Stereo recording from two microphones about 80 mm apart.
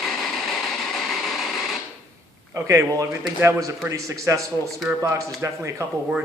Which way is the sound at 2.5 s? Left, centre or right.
Right.